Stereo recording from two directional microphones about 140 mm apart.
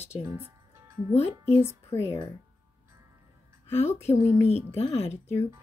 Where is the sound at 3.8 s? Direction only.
50° left (ahead or behind).